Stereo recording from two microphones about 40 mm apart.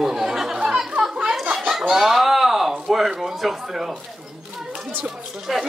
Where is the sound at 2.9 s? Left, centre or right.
Centre.